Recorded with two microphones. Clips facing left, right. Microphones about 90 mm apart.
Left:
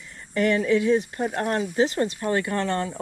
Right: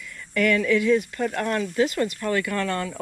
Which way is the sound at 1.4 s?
40° left (ahead or behind).